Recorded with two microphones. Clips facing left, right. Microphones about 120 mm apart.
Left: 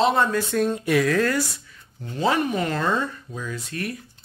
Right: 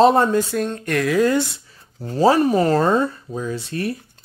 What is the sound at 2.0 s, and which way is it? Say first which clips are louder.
Speech: right 7 dB; 35° right (ahead or behind).